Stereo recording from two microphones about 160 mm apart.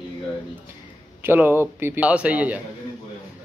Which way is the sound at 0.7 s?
15° right (ahead or behind).